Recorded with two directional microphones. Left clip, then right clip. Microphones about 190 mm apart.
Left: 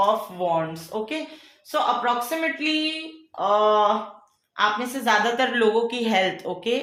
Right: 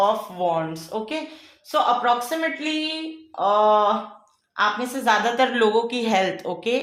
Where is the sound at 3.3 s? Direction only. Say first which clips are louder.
Right 2 dB; 20° right (ahead or behind).